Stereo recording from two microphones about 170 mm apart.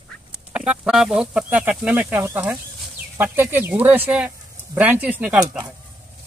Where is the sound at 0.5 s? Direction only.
5° right (ahead or behind).